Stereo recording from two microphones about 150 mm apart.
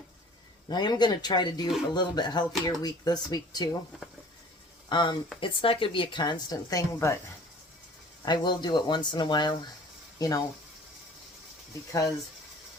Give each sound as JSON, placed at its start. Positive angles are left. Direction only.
{"t": 0.7, "sound": "speech", "side_deg": 30}
{"t": 4.9, "sound": "speech", "side_deg": 30}
{"t": 8.2, "sound": "speech", "side_deg": 30}
{"t": 11.9, "sound": "speech", "side_deg": 25}